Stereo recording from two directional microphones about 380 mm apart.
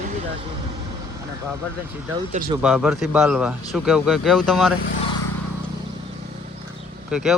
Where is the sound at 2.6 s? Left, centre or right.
Centre.